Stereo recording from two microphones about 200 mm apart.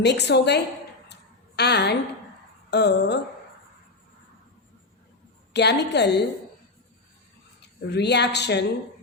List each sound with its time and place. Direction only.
0.0 s a woman's voice: 60° left (ahead or behind)
1.0 s a sound: 55° left (ahead or behind)
2.6 s a woman's voice: 60° left (ahead or behind)
5.5 s a woman's voice: 60° left (ahead or behind)
7.8 s a woman's voice: 55° left (ahead or behind)